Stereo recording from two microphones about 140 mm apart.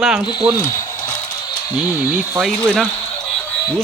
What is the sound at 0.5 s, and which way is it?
Speech, 20° left (ahead or behind).